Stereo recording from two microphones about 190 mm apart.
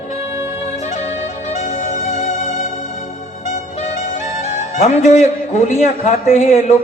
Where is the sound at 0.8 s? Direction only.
35° left (ahead or behind).